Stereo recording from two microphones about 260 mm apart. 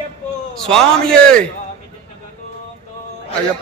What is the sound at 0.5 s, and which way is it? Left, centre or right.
Speech, centre.